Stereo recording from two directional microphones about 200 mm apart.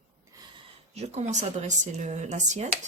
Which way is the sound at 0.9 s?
30° right (ahead or behind).